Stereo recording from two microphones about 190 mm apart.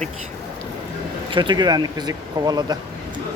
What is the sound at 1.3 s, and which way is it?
Speech, 25° right (ahead or behind).